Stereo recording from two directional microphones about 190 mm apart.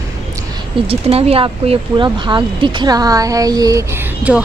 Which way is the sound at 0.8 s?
30° right (ahead or behind).